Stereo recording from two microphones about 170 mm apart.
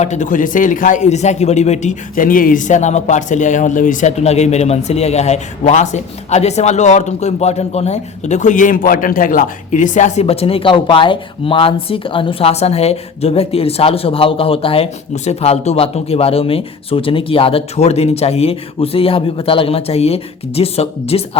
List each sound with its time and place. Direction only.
0.0 s speech: 45° left (ahead or behind)